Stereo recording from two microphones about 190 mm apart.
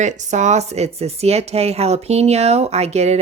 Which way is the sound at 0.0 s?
40° right (ahead or behind).